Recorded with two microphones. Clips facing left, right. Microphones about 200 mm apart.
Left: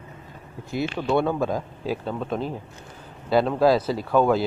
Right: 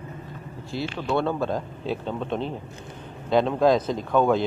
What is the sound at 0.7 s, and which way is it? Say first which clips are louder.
Speech: left 3 dB; 15° left (ahead or behind).